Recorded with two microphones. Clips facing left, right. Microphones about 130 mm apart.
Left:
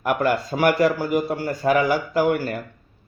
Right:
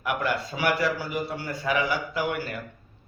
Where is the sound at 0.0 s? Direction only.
45° left (ahead or behind).